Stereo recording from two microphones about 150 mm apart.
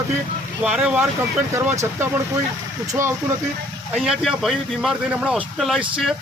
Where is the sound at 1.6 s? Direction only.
15° right (ahead or behind).